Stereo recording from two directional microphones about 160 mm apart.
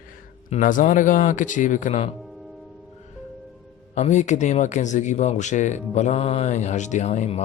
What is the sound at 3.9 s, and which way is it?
Speech, 45° left (ahead or behind).